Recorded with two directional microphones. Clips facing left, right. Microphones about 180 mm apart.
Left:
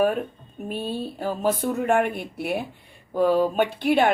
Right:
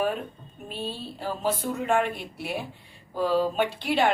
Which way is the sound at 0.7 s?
50° left (ahead or behind).